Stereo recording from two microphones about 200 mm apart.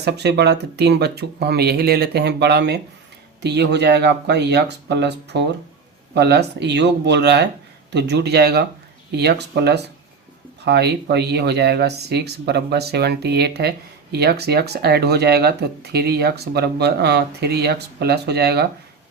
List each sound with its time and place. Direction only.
0.0 s speech: 55° right (ahead or behind)